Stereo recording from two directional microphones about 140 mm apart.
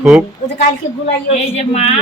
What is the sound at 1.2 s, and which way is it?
Speech, 45° left (ahead or behind).